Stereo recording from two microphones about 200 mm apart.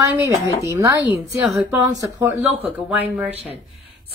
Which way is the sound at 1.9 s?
15° right (ahead or behind).